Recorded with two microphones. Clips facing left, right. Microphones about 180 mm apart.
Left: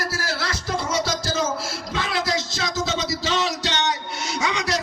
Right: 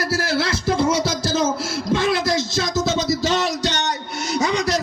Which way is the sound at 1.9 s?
60° right (ahead or behind).